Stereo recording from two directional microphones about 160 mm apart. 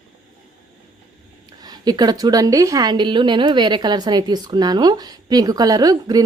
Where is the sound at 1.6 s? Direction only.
25° right (ahead or behind).